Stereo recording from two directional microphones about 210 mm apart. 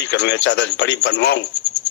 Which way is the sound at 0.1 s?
55° left (ahead or behind).